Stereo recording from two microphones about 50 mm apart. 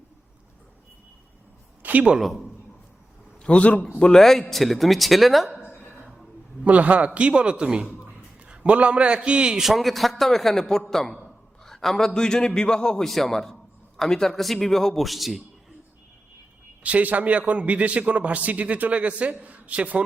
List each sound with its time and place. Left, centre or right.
1.8 s speech: right
3.4 s a man's voice: left
4.0 s a man's voice: centre
6.7 s a man's voice: right
9.6 s a man's voice: centre
13.1 s a man's voice: centre
16.8 s a man's voice: right